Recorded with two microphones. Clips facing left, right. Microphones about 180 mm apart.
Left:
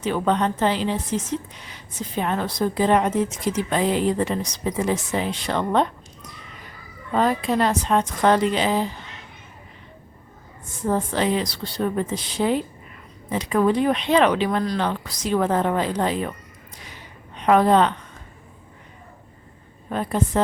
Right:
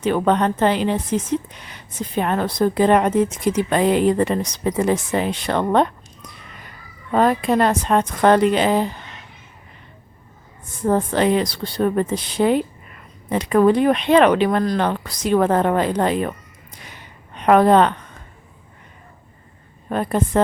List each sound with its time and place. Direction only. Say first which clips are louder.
0.0 s a woman's voice: right 4 dB; 60° right (ahead or behind)
7.1 s a woman's voice: right 4 dB; 55° right (ahead or behind)
10.8 s a woman's voice: right 4 dB; 55° right (ahead or behind)
17.3 s a woman's voice: right 3 dB; 60° right (ahead or behind)
19.9 s a woman's voice: right 3 dB; 55° right (ahead or behind)